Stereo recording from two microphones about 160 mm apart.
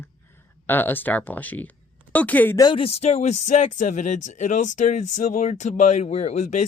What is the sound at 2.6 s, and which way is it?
Speech, 30° left (ahead or behind).